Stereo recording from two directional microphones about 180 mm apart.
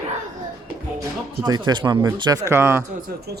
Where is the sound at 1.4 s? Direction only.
25° right (ahead or behind).